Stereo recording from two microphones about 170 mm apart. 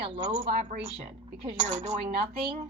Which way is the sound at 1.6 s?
45° right (ahead or behind).